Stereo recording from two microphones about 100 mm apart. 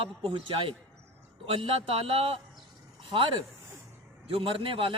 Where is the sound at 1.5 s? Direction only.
70° right (ahead or behind).